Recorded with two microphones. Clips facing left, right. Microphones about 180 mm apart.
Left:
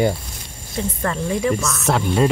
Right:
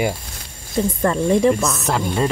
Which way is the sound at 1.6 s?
Centre (ahead or behind).